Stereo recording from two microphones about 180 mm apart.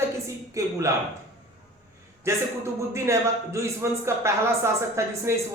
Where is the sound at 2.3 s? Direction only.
15° right (ahead or behind).